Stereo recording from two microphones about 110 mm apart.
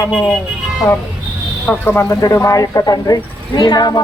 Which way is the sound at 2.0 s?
25° left (ahead or behind).